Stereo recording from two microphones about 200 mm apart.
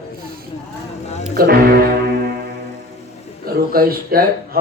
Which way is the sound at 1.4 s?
50° right (ahead or behind).